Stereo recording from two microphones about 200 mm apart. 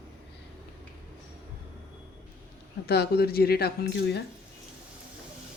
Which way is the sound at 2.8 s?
55° left (ahead or behind).